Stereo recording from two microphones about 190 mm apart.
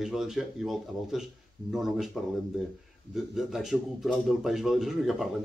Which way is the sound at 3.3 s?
Centre (ahead or behind).